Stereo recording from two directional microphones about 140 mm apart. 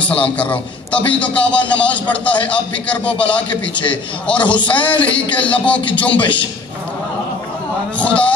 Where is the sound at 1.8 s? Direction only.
10° left (ahead or behind).